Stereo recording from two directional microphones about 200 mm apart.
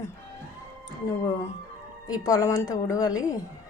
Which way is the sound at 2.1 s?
20° left (ahead or behind).